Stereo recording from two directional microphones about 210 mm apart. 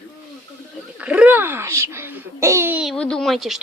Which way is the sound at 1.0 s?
5° right (ahead or behind).